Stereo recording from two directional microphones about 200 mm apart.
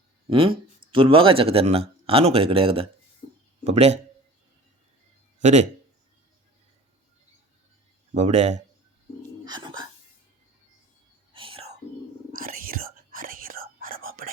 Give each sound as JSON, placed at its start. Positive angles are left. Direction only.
{"t": 0.3, "sound": "a man's voice", "side_deg": -25}
{"t": 5.4, "sound": "speech", "side_deg": -35}
{"t": 8.1, "sound": "a man's voice", "side_deg": -35}
{"t": 9.4, "sound": "a sound", "side_deg": -20}
{"t": 11.3, "sound": "whispering", "side_deg": -25}
{"t": 12.3, "sound": "whispering", "side_deg": -45}